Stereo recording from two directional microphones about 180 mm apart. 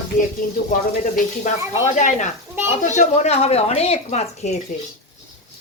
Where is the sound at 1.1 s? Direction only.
45° left (ahead or behind).